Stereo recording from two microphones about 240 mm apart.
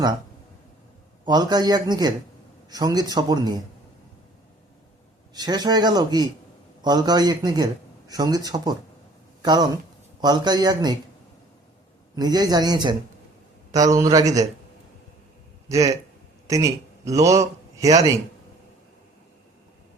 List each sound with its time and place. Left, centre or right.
1.2 s a man's voice: centre
5.3 s a man's voice: centre
12.1 s a man's voice: centre
15.7 s a man's voice: centre